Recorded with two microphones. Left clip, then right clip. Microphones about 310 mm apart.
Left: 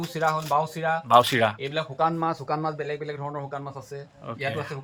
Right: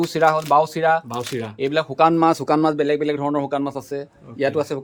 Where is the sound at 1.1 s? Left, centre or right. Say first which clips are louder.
Left 9 dB; centre.